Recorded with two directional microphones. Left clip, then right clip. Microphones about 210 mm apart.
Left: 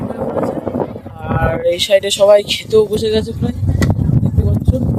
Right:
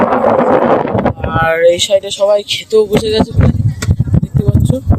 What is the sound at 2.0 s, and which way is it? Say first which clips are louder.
Speech: left 2 dB; 20° left (ahead or behind).